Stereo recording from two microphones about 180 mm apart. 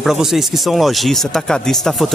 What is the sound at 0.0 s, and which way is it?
Speech, centre (ahead or behind).